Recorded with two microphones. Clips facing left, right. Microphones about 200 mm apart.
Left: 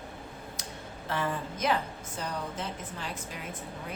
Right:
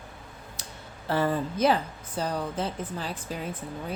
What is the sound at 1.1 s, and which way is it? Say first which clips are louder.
A woman's voice: right 7 dB; 35° right (ahead or behind).